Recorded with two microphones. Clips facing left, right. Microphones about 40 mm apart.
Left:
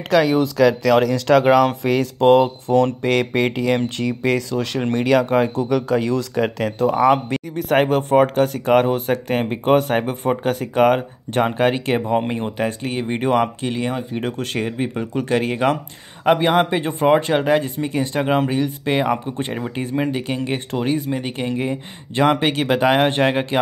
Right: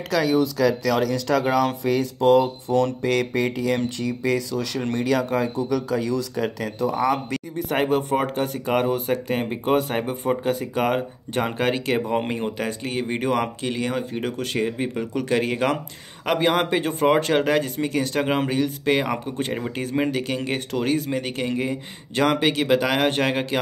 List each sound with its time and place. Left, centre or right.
0.1 s speech: left
1.8 s speech: left
2.2 s speech: left
4.9 s speech: left
7.0 s speech: left
12.3 s speech: centre
14.2 s speech: left
14.8 s speech: left
16.3 s speech: centre
18.2 s speech: centre
18.5 s speech: centre